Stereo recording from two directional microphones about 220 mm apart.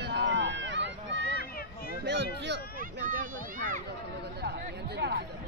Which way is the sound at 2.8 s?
40° right (ahead or behind).